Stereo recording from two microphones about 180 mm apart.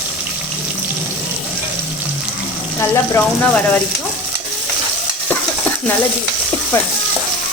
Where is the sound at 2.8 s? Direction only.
15° left (ahead or behind).